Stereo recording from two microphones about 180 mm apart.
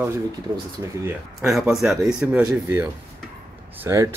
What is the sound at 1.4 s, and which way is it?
A man's voice, centre (ahead or behind).